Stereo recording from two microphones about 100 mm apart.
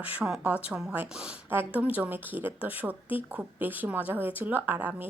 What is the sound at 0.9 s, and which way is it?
A woman's voice, 15° right (ahead or behind).